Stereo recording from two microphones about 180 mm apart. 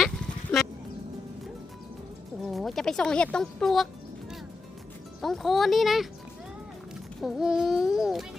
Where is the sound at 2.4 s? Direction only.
Centre (ahead or behind).